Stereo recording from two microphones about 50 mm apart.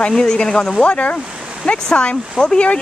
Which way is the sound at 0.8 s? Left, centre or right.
Left.